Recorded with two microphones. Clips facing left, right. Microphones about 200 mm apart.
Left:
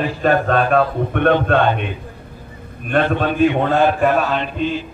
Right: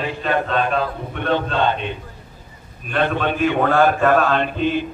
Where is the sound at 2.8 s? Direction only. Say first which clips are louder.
Left 3 dB; 50° left (ahead or behind).